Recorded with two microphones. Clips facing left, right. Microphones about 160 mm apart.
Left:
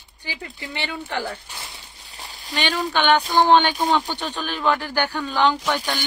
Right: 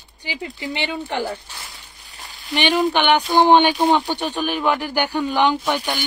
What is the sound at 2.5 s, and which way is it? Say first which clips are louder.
A woman's voice: right 6 dB; 20° right (ahead or behind).